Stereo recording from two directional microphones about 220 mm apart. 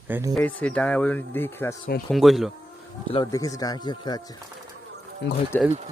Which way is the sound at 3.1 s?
15° left (ahead or behind).